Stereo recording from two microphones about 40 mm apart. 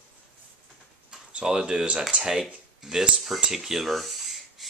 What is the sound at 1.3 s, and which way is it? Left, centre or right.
Speech, right.